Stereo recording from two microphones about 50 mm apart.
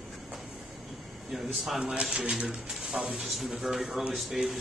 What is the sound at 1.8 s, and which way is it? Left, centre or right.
Speech, right.